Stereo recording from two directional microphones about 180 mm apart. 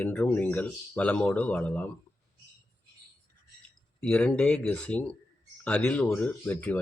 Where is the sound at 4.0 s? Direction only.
5° left (ahead or behind).